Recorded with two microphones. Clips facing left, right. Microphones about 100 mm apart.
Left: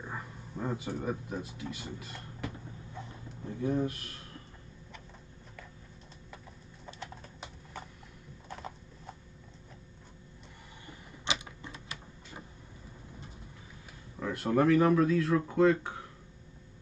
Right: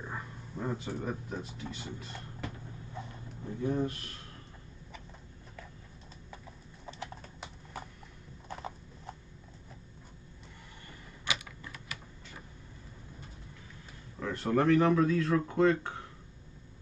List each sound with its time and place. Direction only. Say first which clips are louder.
0.0 s a sound: even; centre (ahead or behind)
0.7 s speech: left 2 dB; 10° left (ahead or behind)
2.0 s a sound: even; 5° left (ahead or behind)
3.4 s speech: left 1 dB; centre (ahead or behind)
11.2 s typewriter: left 1 dB; 25° left (ahead or behind)
14.2 s speech: left 1 dB; 10° left (ahead or behind)